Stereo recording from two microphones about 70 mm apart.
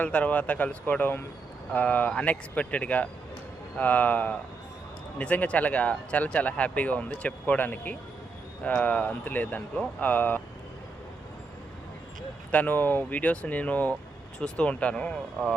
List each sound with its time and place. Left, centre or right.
0.0 s speech: left
12.5 s speech: left